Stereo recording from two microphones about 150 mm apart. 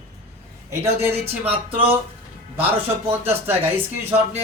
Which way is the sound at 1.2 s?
40° right (ahead or behind).